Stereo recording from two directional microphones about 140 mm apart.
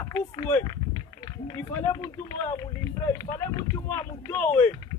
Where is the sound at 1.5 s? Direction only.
25° left (ahead or behind).